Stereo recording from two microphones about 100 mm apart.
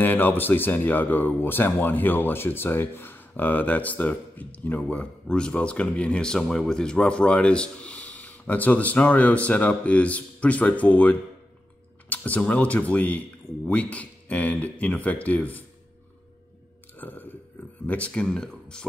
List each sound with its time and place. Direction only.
0.0 s speech: 20° left (ahead or behind)
17.0 s a sound: 20° left (ahead or behind)
17.8 s speech: 15° left (ahead or behind)